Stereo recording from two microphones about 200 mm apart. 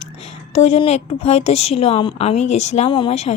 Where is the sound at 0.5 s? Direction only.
30° left (ahead or behind).